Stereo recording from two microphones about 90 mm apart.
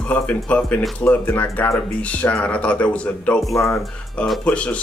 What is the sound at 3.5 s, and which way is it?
Speech, 35° left (ahead or behind).